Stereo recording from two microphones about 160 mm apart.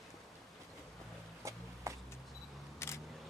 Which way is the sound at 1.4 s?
20° right (ahead or behind).